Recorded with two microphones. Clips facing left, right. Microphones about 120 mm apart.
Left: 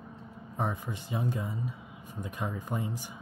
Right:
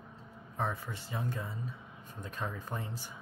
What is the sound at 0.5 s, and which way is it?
Speech, 15° left (ahead or behind).